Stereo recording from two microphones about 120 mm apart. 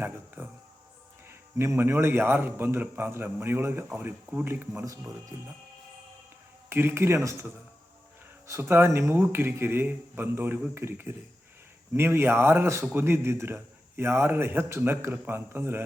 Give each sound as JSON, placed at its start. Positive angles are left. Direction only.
{"t": 0.0, "sound": "a sound", "side_deg": -15}
{"t": 1.3, "sound": "a man's voice", "side_deg": -20}
{"t": 6.7, "sound": "a man's voice", "side_deg": -20}